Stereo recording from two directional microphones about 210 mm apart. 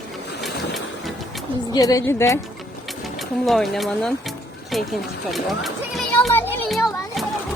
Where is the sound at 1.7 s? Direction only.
15° left (ahead or behind).